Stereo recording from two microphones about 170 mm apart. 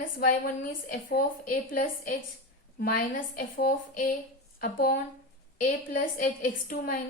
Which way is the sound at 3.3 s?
55° left (ahead or behind).